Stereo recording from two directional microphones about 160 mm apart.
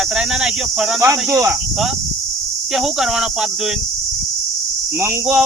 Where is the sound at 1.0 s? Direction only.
20° right (ahead or behind).